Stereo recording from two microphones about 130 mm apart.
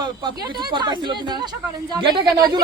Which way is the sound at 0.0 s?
35° right (ahead or behind).